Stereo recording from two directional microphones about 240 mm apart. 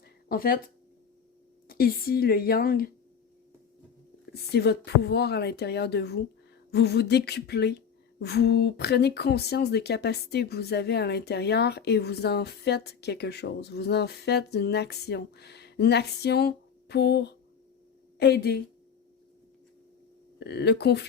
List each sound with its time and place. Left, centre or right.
0.3 s a woman's voice: left
1.6 s a woman's voice: left
4.5 s speech: left
20.4 s speech: left